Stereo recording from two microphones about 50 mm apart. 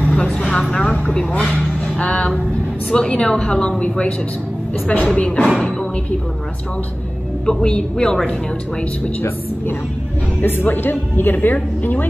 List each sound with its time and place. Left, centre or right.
0.0 s vehicle: left
0.6 s vehicle: centre
2.0 s a woman's voice: left
7.4 s a woman's voice: centre
10.4 s a woman's voice: left